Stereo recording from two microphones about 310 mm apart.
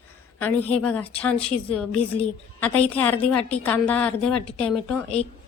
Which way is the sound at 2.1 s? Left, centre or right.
Centre.